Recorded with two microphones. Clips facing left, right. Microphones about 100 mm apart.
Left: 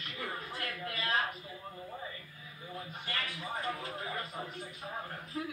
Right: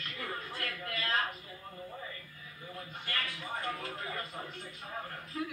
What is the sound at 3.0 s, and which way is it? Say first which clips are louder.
Speech: right 1 dB; 20° left (ahead or behind).